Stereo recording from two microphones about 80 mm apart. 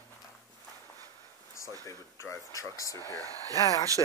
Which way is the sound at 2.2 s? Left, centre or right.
Left.